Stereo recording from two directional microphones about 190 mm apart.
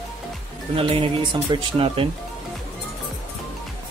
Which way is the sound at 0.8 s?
30° right (ahead or behind).